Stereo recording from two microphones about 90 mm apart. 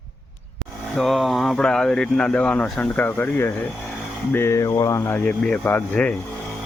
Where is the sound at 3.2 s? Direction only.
25° left (ahead or behind).